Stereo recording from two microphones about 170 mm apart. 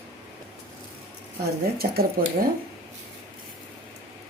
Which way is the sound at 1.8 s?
65° right (ahead or behind).